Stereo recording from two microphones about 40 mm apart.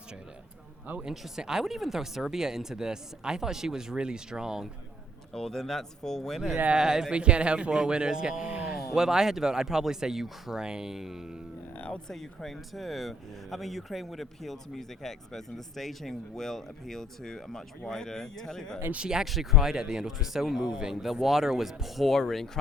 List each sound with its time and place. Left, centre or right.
1.4 s speech: centre
5.3 s speech: centre
6.7 s speech: centre
8.4 s a sound: right
8.7 s speech: centre
10.6 s speech: centre
12.0 s speech: centre
19.2 s speech: centre